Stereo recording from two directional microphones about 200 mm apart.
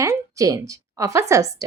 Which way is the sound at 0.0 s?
15° right (ahead or behind).